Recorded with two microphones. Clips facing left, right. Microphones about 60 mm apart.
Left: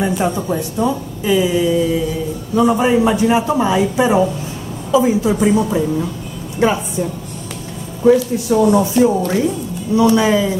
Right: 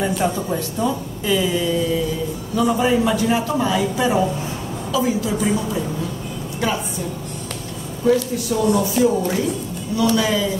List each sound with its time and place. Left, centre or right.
0.0 s a woman's voice: centre; by 6.8 s left
8.0 s a man's voice: left
9.9 s a man's voice: left